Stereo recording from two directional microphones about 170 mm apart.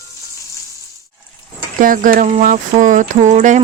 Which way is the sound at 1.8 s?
55° right (ahead or behind).